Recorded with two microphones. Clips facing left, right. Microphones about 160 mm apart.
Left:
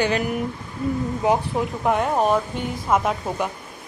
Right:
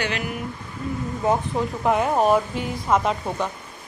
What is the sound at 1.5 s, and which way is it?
Speech, centre (ahead or behind).